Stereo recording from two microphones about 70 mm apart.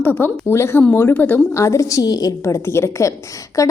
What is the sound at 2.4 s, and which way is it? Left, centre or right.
Speech, left.